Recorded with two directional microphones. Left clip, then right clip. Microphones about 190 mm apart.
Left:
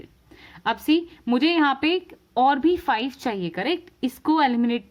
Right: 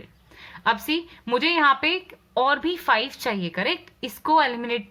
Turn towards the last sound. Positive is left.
turn(degrees=50)  # may be behind; listen again after turning